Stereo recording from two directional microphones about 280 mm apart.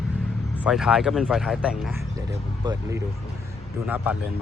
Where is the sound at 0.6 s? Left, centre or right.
Centre.